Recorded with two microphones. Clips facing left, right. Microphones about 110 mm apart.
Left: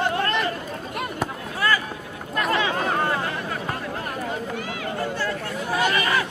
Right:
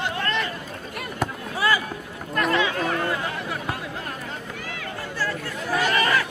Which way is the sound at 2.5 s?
35° left (ahead or behind).